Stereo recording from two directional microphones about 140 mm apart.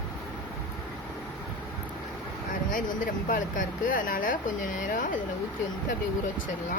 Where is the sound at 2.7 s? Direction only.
75° left (ahead or behind).